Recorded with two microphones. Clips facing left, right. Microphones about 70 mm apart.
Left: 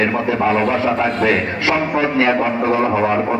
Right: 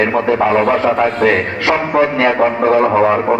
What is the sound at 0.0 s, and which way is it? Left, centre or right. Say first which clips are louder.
A man's voice: right 4 dB; right.